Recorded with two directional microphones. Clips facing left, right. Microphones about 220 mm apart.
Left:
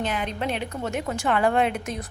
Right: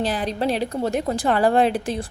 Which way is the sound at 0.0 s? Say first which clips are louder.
Right 5 dB; 35° right (ahead or behind).